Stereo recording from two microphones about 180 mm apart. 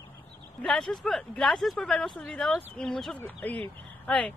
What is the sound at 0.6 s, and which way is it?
Speech, centre (ahead or behind).